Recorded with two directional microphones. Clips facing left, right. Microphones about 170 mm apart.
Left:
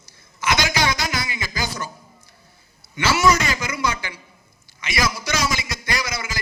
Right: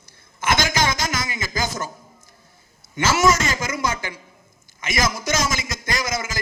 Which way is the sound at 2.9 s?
45° right (ahead or behind).